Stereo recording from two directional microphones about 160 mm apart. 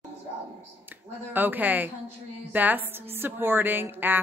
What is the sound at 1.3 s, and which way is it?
A woman's voice, 10° right (ahead or behind).